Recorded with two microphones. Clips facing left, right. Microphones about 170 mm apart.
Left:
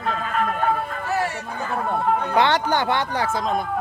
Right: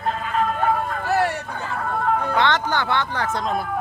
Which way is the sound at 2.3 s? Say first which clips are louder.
Left 2 dB; 15° left (ahead or behind).